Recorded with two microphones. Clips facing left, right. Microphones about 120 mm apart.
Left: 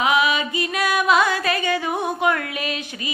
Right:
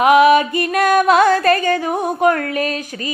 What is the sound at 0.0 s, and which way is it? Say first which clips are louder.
Music: right 9 dB; 50° right (ahead or behind).